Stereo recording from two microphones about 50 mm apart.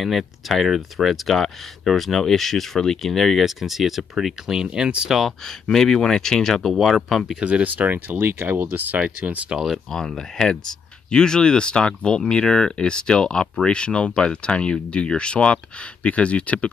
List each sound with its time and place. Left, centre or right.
0.0 s speech: centre
4.7 s speech: centre
5.1 s speech: centre
7.3 s speech: right
9.9 s speech: centre